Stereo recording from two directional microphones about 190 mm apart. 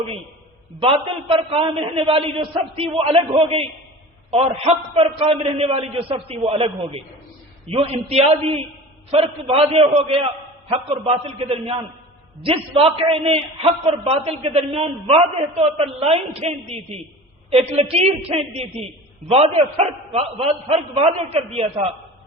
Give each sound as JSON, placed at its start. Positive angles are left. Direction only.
{"t": 0.8, "sound": "a man's voice", "side_deg": -25}